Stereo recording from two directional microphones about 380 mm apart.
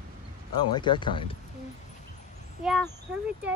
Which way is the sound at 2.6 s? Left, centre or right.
Centre.